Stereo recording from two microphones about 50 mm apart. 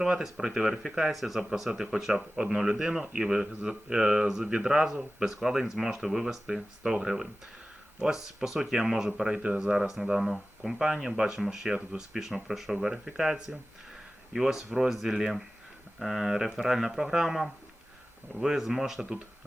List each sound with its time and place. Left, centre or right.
0.2 s speech: centre